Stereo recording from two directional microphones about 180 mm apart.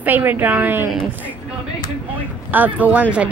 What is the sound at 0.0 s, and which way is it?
Speech, 10° right (ahead or behind).